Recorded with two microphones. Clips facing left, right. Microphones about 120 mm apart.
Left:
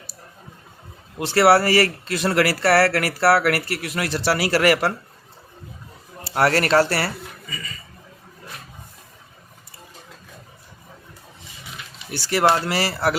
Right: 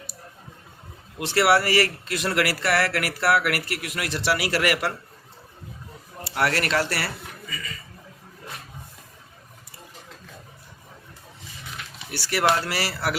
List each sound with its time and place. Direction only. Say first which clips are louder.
1.2 s speech: left 5 dB; 35° left (ahead or behind)
6.3 s speech: left 6 dB; 40° left (ahead or behind)
12.1 s speech: left 4 dB; 25° left (ahead or behind)